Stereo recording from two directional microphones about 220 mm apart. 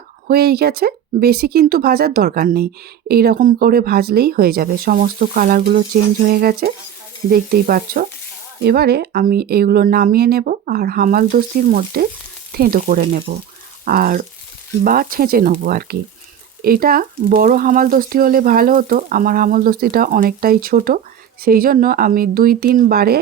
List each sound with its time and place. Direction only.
0.3 s speech: 45° right (ahead or behind)